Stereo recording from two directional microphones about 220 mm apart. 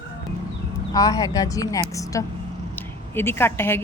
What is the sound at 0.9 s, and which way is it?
Speech, 15° left (ahead or behind).